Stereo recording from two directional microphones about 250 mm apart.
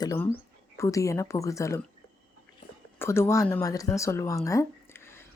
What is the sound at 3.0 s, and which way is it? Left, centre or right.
Speech, centre.